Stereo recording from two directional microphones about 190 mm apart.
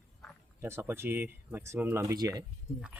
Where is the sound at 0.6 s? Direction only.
15° right (ahead or behind).